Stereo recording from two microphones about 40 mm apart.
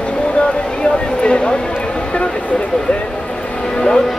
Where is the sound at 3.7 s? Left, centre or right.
Centre.